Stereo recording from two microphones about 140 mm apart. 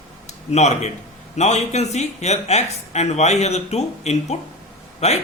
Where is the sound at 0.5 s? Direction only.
55° left (ahead or behind).